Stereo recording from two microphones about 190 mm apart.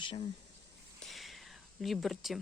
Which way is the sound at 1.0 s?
Centre (ahead or behind).